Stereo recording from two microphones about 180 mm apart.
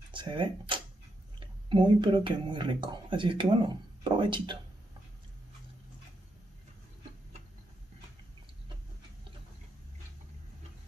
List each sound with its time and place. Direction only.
0.1 s speech: 25° right (ahead or behind)